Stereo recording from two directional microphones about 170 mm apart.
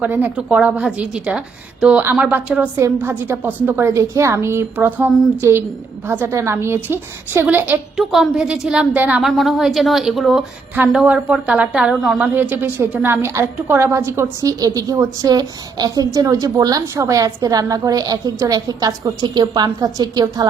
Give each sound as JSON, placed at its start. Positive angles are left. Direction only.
{"t": 0.0, "sound": "a woman's voice", "side_deg": -10}